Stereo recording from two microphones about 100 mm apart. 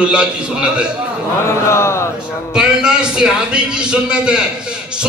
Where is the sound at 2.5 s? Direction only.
10° right (ahead or behind).